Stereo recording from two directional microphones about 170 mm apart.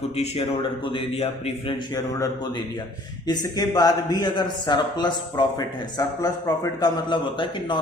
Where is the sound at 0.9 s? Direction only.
35° left (ahead or behind).